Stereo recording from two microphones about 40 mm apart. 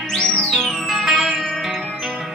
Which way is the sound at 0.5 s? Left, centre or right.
Centre.